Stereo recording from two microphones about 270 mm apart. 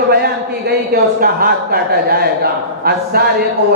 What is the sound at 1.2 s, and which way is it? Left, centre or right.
A man's voice, right.